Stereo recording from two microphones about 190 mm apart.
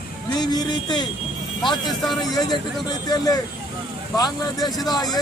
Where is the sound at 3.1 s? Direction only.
20° left (ahead or behind).